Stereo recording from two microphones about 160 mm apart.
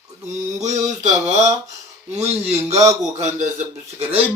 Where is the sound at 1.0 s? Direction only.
45° right (ahead or behind).